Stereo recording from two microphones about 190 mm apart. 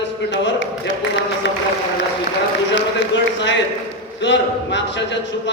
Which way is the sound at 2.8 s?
75° left (ahead or behind).